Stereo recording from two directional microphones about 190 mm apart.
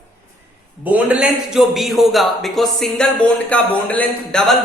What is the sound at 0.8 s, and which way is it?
A man's voice, 5° right (ahead or behind).